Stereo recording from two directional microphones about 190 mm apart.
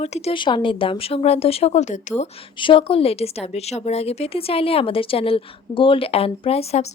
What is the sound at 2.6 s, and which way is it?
A woman's voice, 25° left (ahead or behind).